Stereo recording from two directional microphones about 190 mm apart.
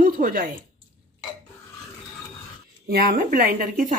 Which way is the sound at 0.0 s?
45° right (ahead or behind).